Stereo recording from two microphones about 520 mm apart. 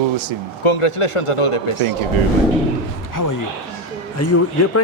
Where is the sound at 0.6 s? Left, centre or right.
Left.